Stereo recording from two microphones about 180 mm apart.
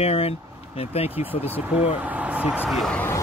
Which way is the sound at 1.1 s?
10° right (ahead or behind).